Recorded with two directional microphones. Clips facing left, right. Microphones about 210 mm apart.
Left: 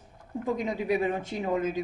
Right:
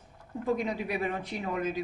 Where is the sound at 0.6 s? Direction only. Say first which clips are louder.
Left 5 dB; 20° left (ahead or behind).